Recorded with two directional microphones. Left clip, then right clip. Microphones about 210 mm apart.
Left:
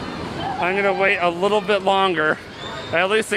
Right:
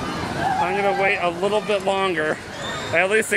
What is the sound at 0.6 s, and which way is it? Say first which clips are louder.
A man's voice: left 3 dB; 35° left (ahead or behind).